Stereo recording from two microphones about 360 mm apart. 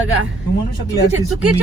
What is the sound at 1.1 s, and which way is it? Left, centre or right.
Speech, right.